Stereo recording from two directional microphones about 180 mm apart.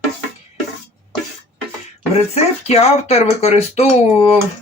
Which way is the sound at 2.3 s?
35° left (ahead or behind).